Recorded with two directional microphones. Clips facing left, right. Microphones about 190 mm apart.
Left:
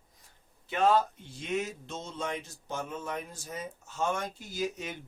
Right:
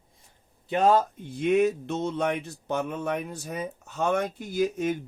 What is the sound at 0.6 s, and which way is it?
Speech, 40° right (ahead or behind).